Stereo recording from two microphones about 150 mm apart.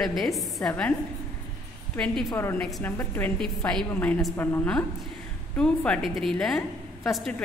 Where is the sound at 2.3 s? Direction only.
15° left (ahead or behind).